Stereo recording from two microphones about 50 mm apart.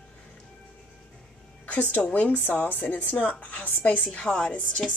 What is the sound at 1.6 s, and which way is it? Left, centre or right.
A woman's voice, left.